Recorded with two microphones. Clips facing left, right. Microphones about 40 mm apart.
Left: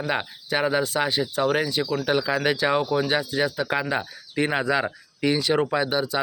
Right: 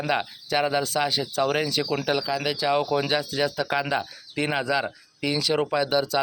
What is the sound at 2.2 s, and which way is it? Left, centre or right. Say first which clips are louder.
Speech: left 3 dB; left.